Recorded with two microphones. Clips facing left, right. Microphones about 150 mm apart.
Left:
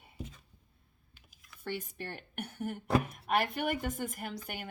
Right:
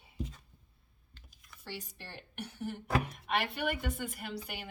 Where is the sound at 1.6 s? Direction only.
55° left (ahead or behind).